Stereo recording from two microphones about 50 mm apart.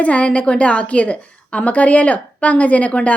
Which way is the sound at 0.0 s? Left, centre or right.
Left.